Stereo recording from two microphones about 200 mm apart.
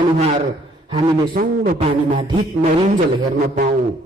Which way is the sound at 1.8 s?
30° right (ahead or behind).